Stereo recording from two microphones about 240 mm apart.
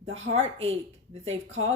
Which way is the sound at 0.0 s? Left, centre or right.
Right.